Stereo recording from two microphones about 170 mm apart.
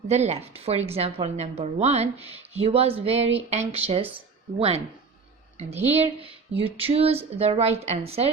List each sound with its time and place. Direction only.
0.1 s a woman's voice: 40° right (ahead or behind)
5.9 s a woman's voice: 35° right (ahead or behind)